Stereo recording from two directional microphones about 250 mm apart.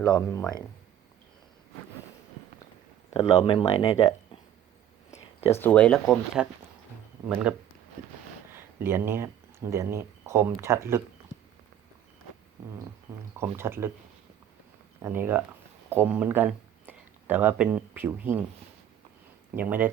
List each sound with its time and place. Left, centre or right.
0.1 s speech: centre
3.1 s speech: centre
5.5 s speech: centre
13.4 s speech: centre
15.0 s speech: centre
19.5 s speech: centre